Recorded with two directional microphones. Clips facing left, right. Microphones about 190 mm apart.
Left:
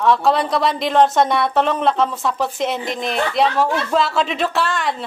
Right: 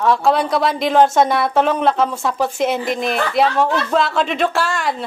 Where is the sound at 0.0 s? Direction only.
Centre (ahead or behind).